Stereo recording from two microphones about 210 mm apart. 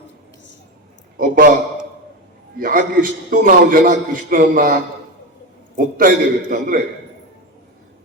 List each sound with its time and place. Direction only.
1.1 s a man's voice: 40° right (ahead or behind)
2.6 s a man's voice: 40° right (ahead or behind)